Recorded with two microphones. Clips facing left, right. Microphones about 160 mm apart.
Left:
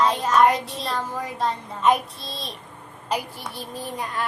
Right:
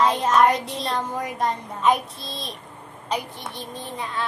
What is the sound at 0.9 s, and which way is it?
Speech, 15° right (ahead or behind).